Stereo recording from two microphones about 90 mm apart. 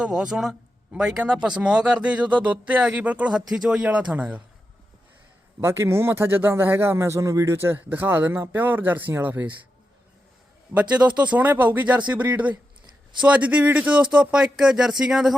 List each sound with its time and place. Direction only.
0.0 s a man's voice: 10° right (ahead or behind)
5.5 s a man's voice: 30° right (ahead or behind)
10.8 s speech: 15° right (ahead or behind)